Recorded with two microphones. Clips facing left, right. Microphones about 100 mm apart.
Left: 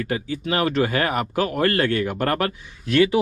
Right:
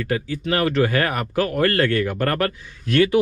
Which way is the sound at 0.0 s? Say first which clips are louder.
Right 1 dB; 20° left (ahead or behind).